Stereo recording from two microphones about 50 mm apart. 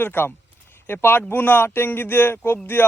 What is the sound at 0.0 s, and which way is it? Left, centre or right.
Speech, left.